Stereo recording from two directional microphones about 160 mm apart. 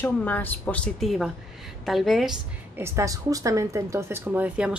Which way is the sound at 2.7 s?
15° right (ahead or behind).